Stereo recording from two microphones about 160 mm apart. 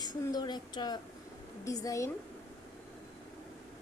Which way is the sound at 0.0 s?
25° left (ahead or behind).